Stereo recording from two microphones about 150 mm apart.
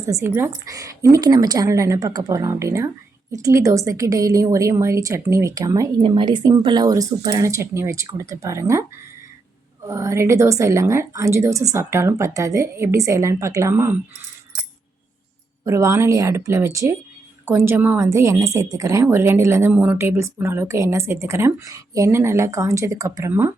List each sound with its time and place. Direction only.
0.0 s a woman's voice: 20° right (ahead or behind)
9.8 s a woman's voice: 20° right (ahead or behind)
15.6 s a woman's voice: 20° right (ahead or behind)
19.7 s a woman's voice: 10° right (ahead or behind)